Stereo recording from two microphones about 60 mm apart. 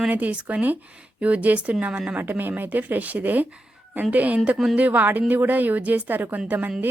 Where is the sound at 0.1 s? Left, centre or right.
Right.